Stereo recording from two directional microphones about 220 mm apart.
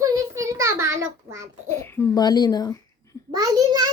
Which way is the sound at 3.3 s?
15° right (ahead or behind).